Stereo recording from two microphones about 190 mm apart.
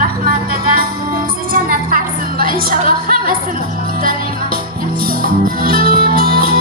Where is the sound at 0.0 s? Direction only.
50° right (ahead or behind).